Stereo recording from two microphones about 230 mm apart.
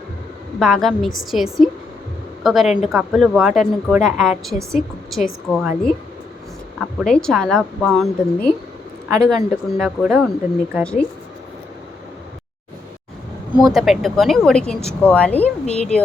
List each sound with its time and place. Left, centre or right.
0.6 s a woman's voice: centre
9.0 s speech: centre
9.3 s a woman's voice: centre
13.5 s a woman's voice: centre
15.6 s a woman's voice: left